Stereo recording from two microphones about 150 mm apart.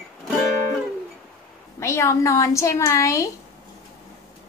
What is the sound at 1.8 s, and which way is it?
A woman's voice, 20° left (ahead or behind).